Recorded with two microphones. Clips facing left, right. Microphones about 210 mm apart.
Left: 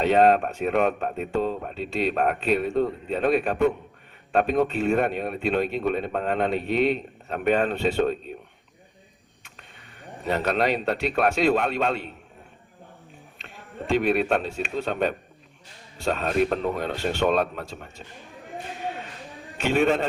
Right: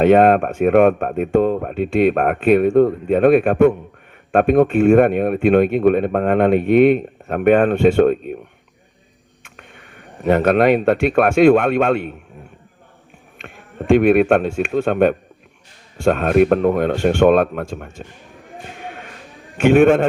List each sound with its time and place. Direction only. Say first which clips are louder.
0.0 s speech: right 7 dB; 55° right (ahead or behind)
9.4 s speech: right 7 dB; 55° right (ahead or behind)
13.4 s a man's voice: right 6 dB; 50° right (ahead or behind)
18.9 s a sound: left 3 dB; 50° right (ahead or behind)
19.5 s speech: right 10 dB; 50° right (ahead or behind)